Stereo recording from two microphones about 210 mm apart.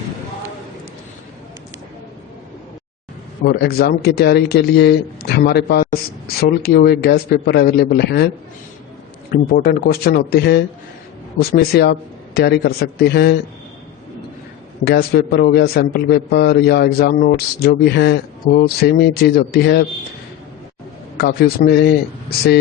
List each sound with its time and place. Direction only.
3.4 s a man's voice: 50° left (ahead or behind)
9.3 s a man's voice: 45° left (ahead or behind)
14.8 s a man's voice: 50° left (ahead or behind)
21.2 s a man's voice: 50° left (ahead or behind)